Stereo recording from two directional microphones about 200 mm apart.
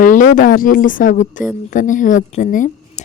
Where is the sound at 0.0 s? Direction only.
40° left (ahead or behind).